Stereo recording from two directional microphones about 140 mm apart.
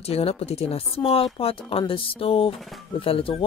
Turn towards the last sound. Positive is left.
turn(degrees=40)  # may be behind; listen again after turning